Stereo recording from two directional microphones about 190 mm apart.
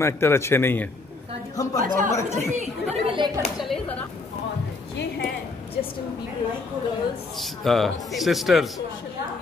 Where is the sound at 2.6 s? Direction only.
25° right (ahead or behind).